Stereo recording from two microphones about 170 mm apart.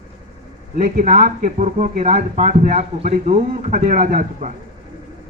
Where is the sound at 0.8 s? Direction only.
45° right (ahead or behind).